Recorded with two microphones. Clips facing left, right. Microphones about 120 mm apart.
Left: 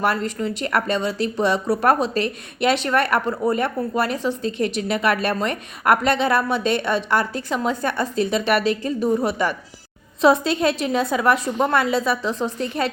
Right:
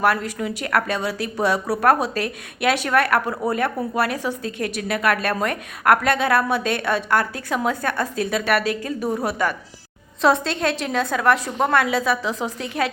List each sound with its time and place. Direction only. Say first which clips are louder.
0.0 s a woman's voice: right 1 dB; 5° right (ahead or behind)